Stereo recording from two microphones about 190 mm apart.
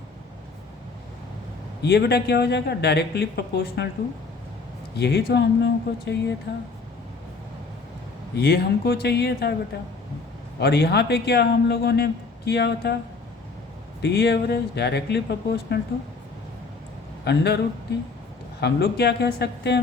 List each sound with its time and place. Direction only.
1.8 s speech: 60° left (ahead or behind)
4.9 s speech: 60° left (ahead or behind)
8.4 s speech: 55° left (ahead or behind)
10.6 s speech: 60° left (ahead or behind)
14.0 s speech: 60° left (ahead or behind)
17.2 s speech: 60° left (ahead or behind)
18.6 s speech: 60° left (ahead or behind)